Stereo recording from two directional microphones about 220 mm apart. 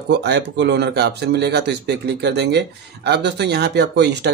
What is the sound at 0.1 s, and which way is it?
Speech, 50° right (ahead or behind).